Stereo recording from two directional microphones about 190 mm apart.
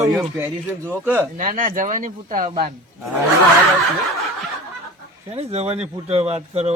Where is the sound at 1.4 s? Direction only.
45° right (ahead or behind).